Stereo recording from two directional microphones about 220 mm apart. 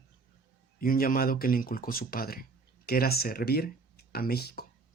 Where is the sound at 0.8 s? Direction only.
40° left (ahead or behind).